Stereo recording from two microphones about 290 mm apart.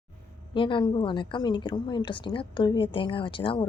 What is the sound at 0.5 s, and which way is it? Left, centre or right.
A woman's voice, centre.